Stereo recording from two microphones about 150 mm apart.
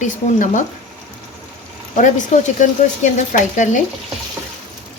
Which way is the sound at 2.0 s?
60° left (ahead or behind).